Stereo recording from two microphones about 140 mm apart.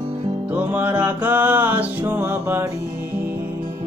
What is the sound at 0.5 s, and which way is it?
Music, 10° right (ahead or behind).